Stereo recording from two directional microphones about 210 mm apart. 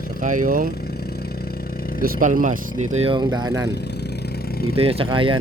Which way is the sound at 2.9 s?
25° right (ahead or behind).